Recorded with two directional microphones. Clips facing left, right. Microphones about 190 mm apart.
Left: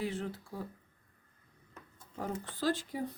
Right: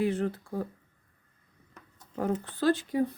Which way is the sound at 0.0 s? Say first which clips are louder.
Right 8 dB; 60° right (ahead or behind).